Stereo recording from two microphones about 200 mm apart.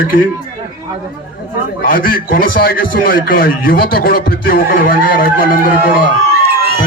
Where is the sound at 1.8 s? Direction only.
45° left (ahead or behind).